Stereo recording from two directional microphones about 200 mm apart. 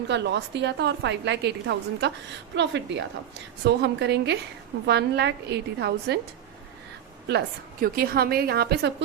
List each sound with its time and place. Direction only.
0.1 s a woman's voice: 60° right (ahead or behind)
7.3 s a woman's voice: 50° right (ahead or behind)